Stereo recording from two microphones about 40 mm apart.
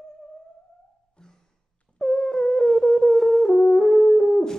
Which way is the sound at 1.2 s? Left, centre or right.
Centre.